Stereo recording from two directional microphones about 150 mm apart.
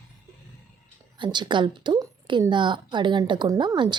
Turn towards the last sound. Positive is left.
turn(degrees=-30)  # may be behind; listen again after turning